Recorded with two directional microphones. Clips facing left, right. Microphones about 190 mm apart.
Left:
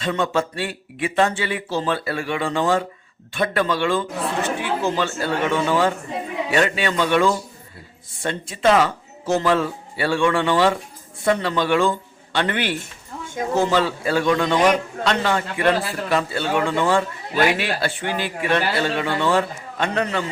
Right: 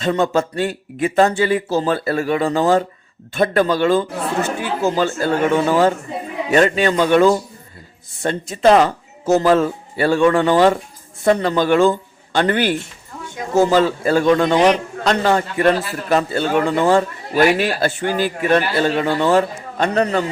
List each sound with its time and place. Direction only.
0.0 s a man's voice: 40° right (ahead or behind)